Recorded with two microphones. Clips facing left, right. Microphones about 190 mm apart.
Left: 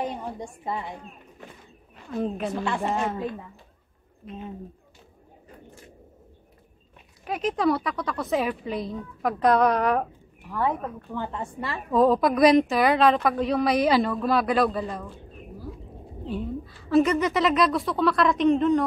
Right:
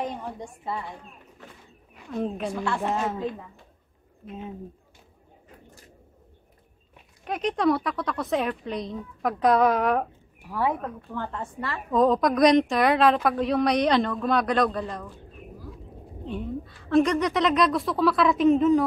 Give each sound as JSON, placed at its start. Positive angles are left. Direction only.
{"t": 0.0, "sound": "a woman's voice", "side_deg": 10}
{"t": 2.0, "sound": "a woman's voice", "side_deg": 0}
{"t": 4.3, "sound": "a woman's voice", "side_deg": -5}
{"t": 7.2, "sound": "a woman's voice", "side_deg": 0}
{"t": 11.1, "sound": "a woman's voice", "side_deg": 15}
{"t": 11.9, "sound": "a woman's voice", "side_deg": 5}
{"t": 16.3, "sound": "a woman's voice", "side_deg": 5}